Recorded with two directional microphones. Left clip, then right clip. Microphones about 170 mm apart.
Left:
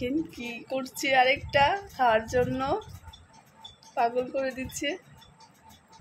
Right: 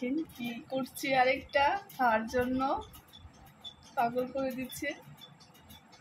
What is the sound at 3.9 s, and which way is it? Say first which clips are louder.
A woman's voice: left 5 dB; 50° left (ahead or behind).